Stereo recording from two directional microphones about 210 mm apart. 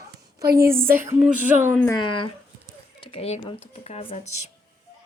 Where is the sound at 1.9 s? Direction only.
25° left (ahead or behind).